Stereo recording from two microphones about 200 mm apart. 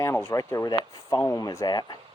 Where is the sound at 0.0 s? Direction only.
15° left (ahead or behind).